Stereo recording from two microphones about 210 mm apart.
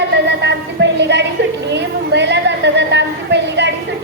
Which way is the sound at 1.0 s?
55° right (ahead or behind).